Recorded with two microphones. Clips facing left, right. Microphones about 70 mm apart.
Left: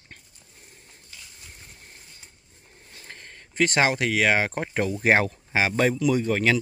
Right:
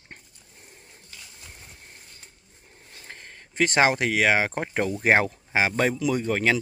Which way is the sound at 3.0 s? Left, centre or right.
Centre.